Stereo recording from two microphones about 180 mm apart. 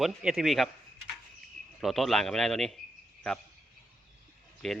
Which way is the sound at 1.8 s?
Centre (ahead or behind).